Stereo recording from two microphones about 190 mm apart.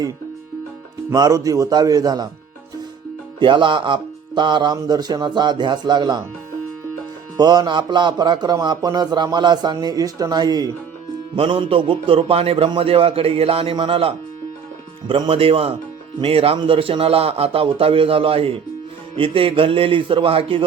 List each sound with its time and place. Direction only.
1.1 s a man's voice: 20° right (ahead or behind)
3.4 s a man's voice: 25° right (ahead or behind)
7.3 s a man's voice: 20° right (ahead or behind)